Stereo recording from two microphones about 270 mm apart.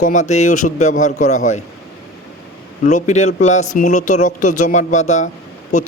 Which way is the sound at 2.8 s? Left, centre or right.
Left.